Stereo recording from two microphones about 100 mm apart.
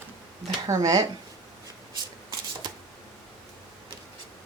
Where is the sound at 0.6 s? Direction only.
35° right (ahead or behind).